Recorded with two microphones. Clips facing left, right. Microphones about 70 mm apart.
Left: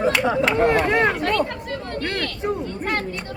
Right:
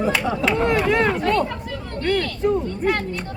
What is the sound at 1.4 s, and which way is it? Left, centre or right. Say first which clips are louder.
Chatter: even; left.